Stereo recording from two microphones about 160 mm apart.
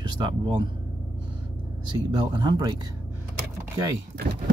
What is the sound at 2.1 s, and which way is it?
Speech, 25° right (ahead or behind).